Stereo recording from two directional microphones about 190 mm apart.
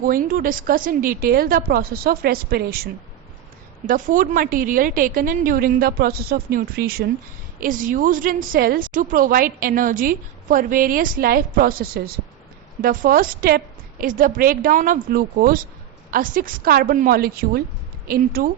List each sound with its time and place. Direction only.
0.0 s a woman's voice: 50° right (ahead or behind)